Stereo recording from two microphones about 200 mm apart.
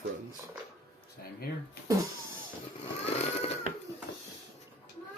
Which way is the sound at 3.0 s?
30° left (ahead or behind).